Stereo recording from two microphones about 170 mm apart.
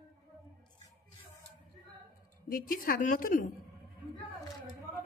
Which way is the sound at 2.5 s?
55° left (ahead or behind).